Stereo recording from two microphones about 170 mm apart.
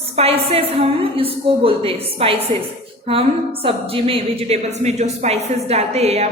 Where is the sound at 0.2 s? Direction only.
35° right (ahead or behind).